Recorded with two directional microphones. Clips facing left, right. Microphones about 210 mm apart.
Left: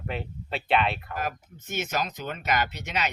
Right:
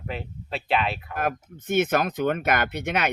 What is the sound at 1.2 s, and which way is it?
Speech, 55° right (ahead or behind).